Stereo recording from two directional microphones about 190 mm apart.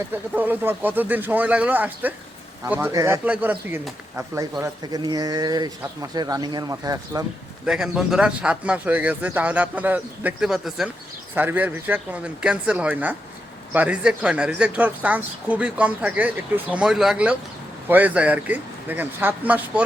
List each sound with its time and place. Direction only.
0.1 s speech: 10° right (ahead or behind)
7.6 s speech: 5° right (ahead or behind)